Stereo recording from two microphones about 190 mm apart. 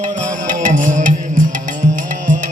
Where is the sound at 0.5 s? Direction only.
45° right (ahead or behind).